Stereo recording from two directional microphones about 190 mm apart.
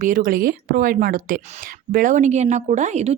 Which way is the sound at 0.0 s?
45° right (ahead or behind).